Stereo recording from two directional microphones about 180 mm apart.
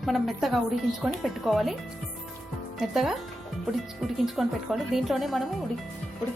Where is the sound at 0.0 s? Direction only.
Centre (ahead or behind).